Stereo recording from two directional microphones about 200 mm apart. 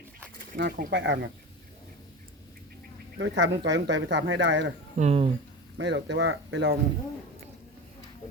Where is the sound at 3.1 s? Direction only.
65° right (ahead or behind).